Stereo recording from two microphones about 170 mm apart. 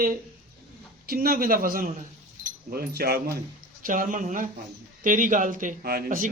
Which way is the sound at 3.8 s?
50° right (ahead or behind).